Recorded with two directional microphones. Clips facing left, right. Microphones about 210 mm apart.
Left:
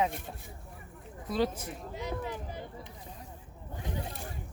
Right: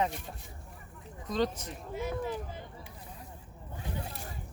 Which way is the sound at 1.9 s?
20° left (ahead or behind).